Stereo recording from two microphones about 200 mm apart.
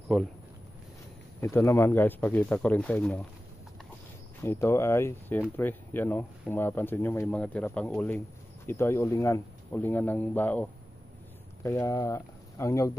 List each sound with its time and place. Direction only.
0.1 s speech: centre (ahead or behind)
1.4 s speech: 15° left (ahead or behind)
4.4 s speech: 10° left (ahead or behind)